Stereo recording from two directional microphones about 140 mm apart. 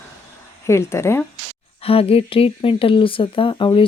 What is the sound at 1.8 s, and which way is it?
Speech, 45° left (ahead or behind).